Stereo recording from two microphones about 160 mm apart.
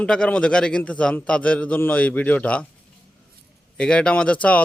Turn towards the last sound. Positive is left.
turn(degrees=10)  # may be behind; listen again after turning